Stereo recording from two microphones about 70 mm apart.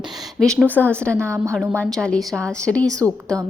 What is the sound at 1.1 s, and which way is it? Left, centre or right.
Speech, right.